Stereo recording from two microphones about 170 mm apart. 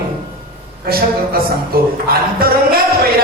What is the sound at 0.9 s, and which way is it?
Speech, 60° right (ahead or behind).